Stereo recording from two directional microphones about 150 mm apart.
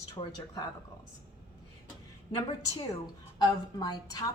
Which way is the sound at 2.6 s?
25° left (ahead or behind).